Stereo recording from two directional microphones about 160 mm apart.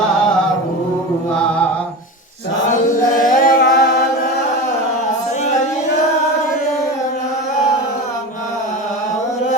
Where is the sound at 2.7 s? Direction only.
55° left (ahead or behind).